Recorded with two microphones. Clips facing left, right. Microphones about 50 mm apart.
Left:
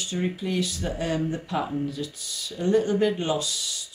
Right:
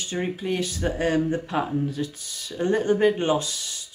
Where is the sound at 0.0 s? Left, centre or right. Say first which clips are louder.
Right 1 dB; right.